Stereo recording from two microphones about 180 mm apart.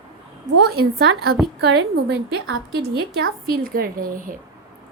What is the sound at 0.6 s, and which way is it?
A woman's voice, 60° right (ahead or behind).